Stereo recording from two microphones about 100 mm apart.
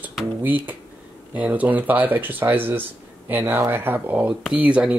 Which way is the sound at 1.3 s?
15° right (ahead or behind).